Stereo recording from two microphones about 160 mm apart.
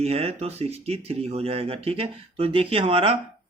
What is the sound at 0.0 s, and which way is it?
Speech, 40° right (ahead or behind).